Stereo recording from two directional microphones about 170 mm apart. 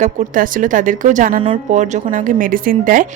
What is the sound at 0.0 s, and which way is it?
A woman's voice, 50° right (ahead or behind).